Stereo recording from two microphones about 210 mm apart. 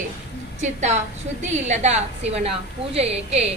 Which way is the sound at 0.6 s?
35° right (ahead or behind).